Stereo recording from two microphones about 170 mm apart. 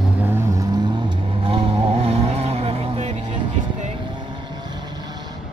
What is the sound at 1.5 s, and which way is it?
Vehicle, 35° right (ahead or behind).